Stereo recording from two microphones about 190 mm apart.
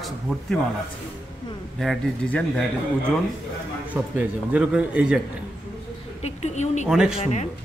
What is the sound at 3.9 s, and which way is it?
A man's voice, 5° right (ahead or behind).